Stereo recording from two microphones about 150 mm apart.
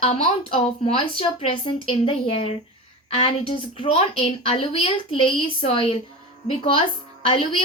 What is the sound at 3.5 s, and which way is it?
Speech, 35° left (ahead or behind).